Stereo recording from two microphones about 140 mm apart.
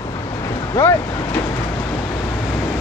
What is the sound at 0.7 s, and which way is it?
Speech, 15° left (ahead or behind).